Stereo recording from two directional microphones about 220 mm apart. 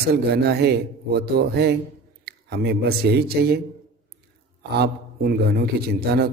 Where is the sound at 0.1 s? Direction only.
45° right (ahead or behind).